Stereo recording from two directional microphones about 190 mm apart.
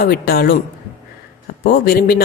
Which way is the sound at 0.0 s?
55° left (ahead or behind).